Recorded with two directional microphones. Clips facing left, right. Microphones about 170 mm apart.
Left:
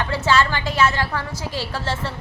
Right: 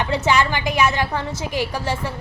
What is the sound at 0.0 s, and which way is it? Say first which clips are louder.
A woman's voice: right 1 dB; 20° right (ahead or behind).